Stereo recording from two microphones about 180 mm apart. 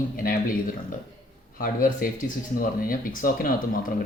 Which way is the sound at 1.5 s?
50° left (ahead or behind).